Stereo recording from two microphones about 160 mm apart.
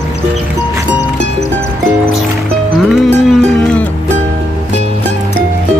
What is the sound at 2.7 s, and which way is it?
Music, centre (ahead or behind).